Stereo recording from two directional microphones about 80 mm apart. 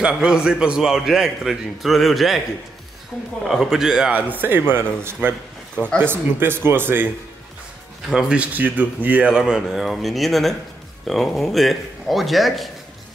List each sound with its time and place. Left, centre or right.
0.0 s a man's voice: centre
3.4 s a man's voice: centre
4.1 s speech: right
8.1 s speech: centre
9.3 s a man's voice: centre